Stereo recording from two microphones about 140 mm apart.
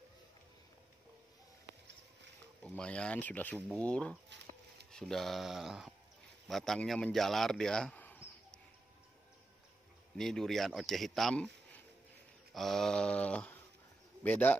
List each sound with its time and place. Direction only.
2.6 s a man's voice: 10° left (ahead or behind)
10.1 s a man's voice: 5° left (ahead or behind)
12.5 s speech: 5° left (ahead or behind)